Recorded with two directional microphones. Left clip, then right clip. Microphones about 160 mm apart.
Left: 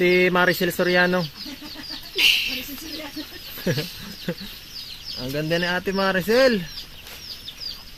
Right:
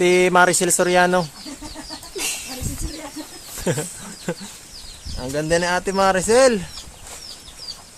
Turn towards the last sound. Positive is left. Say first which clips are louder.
# right 3 dB
turn(degrees=-10)  # may be behind; listen again after turning